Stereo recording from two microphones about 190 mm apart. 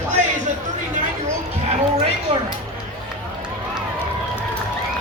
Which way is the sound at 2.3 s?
30° right (ahead or behind).